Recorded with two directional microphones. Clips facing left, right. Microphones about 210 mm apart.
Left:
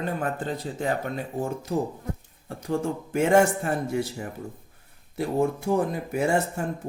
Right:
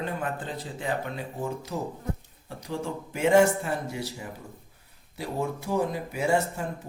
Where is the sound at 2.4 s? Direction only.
50° left (ahead or behind).